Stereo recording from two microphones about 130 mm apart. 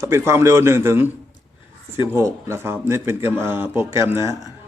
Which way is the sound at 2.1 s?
20° right (ahead or behind).